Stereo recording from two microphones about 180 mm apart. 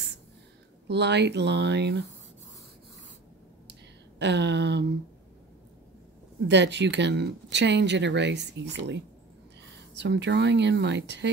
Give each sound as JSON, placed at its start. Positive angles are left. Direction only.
{"t": 0.8, "sound": "speech", "side_deg": -70}
{"t": 4.2, "sound": "speech", "side_deg": -75}
{"t": 6.4, "sound": "speech", "side_deg": -75}